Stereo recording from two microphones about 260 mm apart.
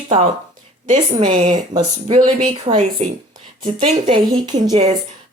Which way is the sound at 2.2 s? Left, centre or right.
Right.